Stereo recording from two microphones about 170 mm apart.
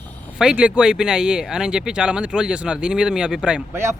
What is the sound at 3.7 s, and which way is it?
Speech, 15° right (ahead or behind).